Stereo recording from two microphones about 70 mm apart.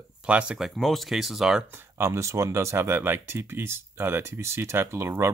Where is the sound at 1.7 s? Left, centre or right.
Right.